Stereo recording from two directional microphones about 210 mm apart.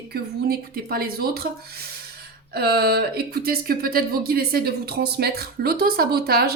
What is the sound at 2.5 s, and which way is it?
Speech, 50° right (ahead or behind).